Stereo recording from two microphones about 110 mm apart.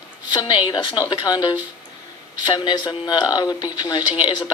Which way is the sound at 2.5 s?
40° left (ahead or behind).